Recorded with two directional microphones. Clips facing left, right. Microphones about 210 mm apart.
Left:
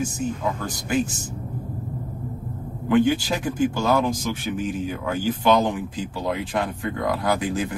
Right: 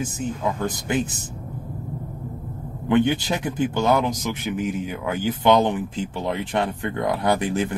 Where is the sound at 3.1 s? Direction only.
20° right (ahead or behind).